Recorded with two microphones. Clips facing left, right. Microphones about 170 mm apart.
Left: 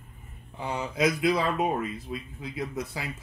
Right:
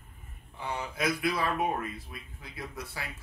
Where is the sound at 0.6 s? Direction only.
25° left (ahead or behind).